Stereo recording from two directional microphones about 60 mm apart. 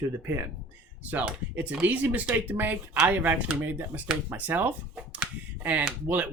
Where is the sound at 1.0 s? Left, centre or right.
Right.